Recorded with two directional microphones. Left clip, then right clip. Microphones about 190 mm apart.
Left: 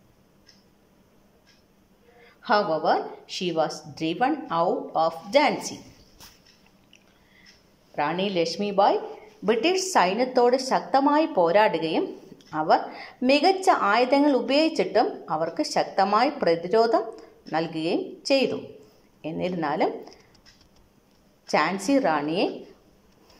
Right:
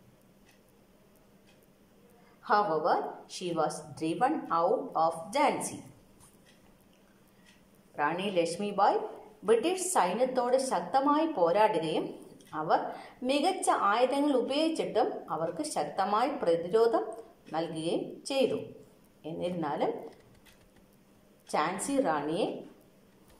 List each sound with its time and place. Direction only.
2.4 s speech: 20° left (ahead or behind)
7.9 s speech: 25° left (ahead or behind)
19.6 s speech: 25° left (ahead or behind)
21.5 s speech: 20° left (ahead or behind)